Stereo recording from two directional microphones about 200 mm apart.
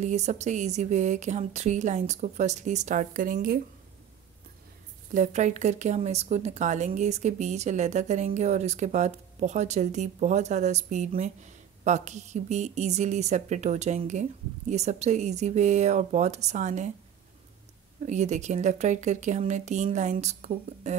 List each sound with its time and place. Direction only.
0.0 s speech: 35° right (ahead or behind)
5.1 s speech: 35° right (ahead or behind)
18.0 s speech: 35° right (ahead or behind)